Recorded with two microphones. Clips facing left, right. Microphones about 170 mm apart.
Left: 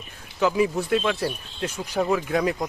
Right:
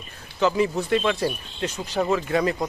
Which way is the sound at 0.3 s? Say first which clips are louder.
Even; 5° left (ahead or behind).